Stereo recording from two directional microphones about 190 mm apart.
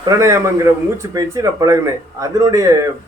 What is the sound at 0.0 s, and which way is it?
Speech, 15° right (ahead or behind).